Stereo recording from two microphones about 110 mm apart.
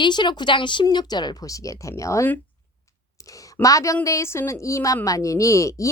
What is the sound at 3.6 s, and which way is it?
A woman's voice, 30° left (ahead or behind).